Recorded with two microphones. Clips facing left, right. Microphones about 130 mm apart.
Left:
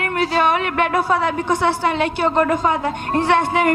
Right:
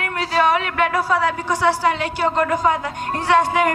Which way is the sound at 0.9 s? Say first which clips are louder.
Left 1 dB; 25° left (ahead or behind).